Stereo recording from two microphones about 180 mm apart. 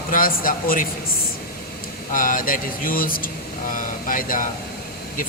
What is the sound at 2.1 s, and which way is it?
A man's voice, 50° left (ahead or behind).